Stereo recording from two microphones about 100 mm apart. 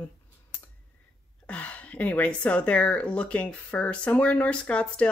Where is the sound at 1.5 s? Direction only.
15° left (ahead or behind).